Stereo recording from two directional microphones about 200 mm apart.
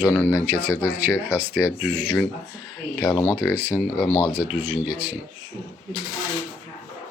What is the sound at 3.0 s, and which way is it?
Speech, 20° left (ahead or behind).